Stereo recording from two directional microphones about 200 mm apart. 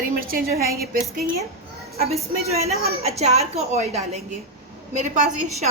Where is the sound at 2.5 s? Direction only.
30° right (ahead or behind).